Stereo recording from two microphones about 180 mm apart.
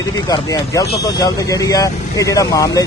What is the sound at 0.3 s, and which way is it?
Speech, 20° left (ahead or behind).